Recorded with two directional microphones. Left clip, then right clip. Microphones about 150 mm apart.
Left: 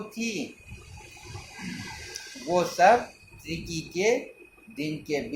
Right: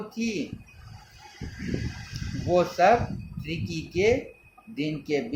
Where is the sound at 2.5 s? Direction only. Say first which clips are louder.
Even; 50° right (ahead or behind).